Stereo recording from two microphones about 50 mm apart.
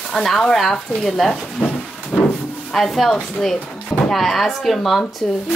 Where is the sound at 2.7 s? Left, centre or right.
Centre.